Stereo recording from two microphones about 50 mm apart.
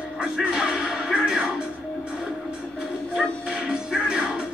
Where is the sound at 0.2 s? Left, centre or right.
Centre.